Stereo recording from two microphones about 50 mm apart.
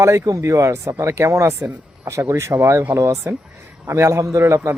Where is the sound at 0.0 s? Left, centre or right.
Right.